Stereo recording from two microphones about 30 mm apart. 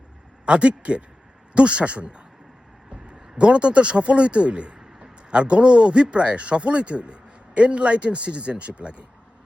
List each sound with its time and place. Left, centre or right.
0.4 s a man's voice: right